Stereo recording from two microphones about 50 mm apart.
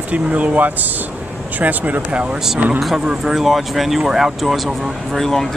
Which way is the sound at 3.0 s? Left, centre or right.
Centre.